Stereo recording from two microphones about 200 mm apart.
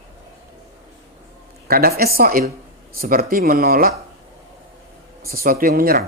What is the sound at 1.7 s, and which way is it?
Speech, 50° right (ahead or behind).